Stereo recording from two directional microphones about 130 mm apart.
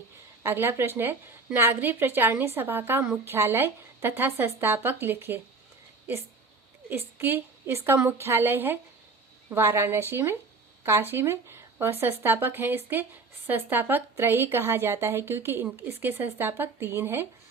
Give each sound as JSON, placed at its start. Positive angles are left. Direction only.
{"t": 0.4, "sound": "speech", "side_deg": -15}
{"t": 6.9, "sound": "a woman's voice", "side_deg": -15}